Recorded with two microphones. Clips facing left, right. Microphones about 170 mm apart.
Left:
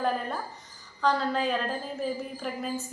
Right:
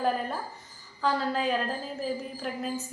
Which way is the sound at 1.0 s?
5° right (ahead or behind).